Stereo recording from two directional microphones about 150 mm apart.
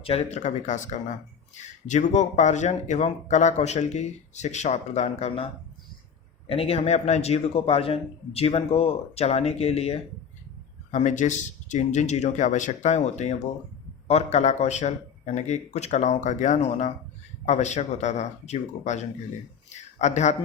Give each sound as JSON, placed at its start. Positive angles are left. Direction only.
{"t": 0.0, "sound": "speech", "side_deg": 40}
{"t": 6.5, "sound": "speech", "side_deg": 40}
{"t": 10.9, "sound": "a man's voice", "side_deg": 55}